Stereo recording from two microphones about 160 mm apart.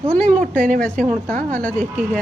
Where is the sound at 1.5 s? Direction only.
10° left (ahead or behind).